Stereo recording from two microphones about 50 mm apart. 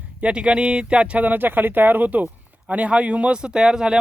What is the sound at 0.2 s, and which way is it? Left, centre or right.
Speech, right.